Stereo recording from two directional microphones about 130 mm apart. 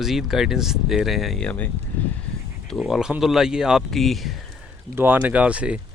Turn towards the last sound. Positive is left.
turn(degrees=-10)  # may be behind; listen again after turning